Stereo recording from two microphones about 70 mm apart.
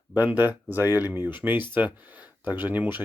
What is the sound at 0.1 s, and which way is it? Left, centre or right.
Speech, right.